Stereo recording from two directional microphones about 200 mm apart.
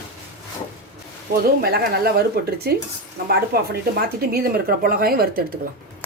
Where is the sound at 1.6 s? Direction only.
50° right (ahead or behind).